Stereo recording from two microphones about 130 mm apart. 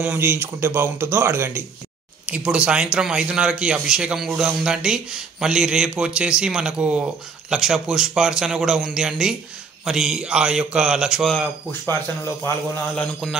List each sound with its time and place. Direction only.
0.0 s speech: 15° right (ahead or behind)
2.2 s speech: 10° right (ahead or behind)
11.3 s speech: 15° left (ahead or behind)
12.9 s speech: 5° left (ahead or behind)